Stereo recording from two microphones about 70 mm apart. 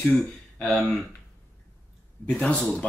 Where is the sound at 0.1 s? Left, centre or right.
Centre.